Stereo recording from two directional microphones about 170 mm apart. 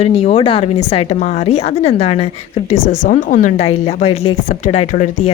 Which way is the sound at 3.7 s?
40° left (ahead or behind).